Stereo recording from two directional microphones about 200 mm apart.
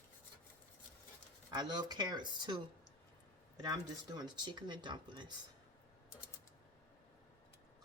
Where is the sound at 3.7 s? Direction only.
20° right (ahead or behind).